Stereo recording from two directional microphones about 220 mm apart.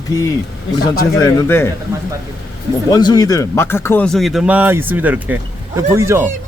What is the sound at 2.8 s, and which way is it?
Speech, 15° left (ahead or behind).